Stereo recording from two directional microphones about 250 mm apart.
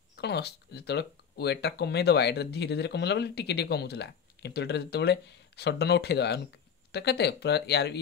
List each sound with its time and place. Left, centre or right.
0.1 s speech: left